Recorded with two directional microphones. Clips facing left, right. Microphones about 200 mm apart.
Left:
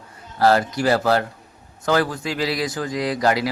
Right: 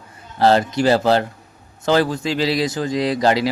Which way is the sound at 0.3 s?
25° right (ahead or behind).